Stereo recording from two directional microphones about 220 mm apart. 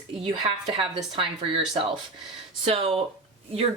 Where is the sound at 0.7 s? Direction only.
20° right (ahead or behind).